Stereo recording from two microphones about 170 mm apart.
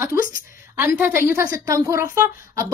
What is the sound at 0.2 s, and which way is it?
Speech, 55° left (ahead or behind).